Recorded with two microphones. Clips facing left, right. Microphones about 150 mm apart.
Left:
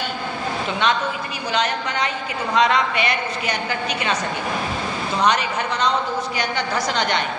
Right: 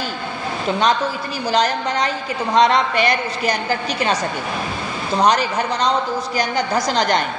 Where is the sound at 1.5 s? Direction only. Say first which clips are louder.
Right 4 dB; 35° right (ahead or behind).